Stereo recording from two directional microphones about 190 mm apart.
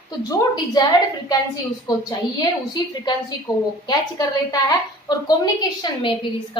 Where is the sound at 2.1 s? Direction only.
20° left (ahead or behind).